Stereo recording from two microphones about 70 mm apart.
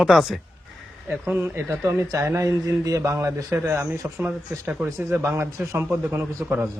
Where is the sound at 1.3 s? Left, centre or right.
Right.